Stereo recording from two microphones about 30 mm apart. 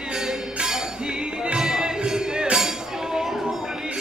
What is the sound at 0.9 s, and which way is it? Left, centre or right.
Music, right.